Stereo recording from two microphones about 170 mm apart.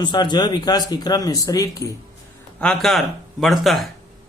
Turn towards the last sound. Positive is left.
turn(degrees=0)  # may be behind; listen again after turning